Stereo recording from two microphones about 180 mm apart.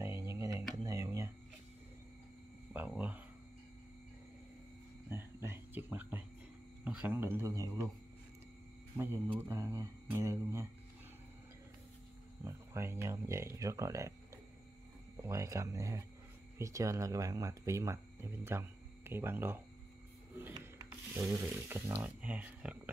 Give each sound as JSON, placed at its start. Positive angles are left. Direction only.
{"t": 0.0, "sound": "a sound", "side_deg": -15}
{"t": 2.7, "sound": "a sound", "side_deg": -10}
{"t": 5.1, "sound": "cricket", "side_deg": -15}
{"t": 6.8, "sound": "speech", "side_deg": -5}
{"t": 8.9, "sound": "speech", "side_deg": -15}
{"t": 12.4, "sound": "speech", "side_deg": -15}
{"t": 15.2, "sound": "speech", "side_deg": -15}
{"t": 21.1, "sound": "speech", "side_deg": -15}